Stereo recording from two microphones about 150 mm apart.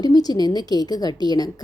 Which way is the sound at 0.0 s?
25° left (ahead or behind).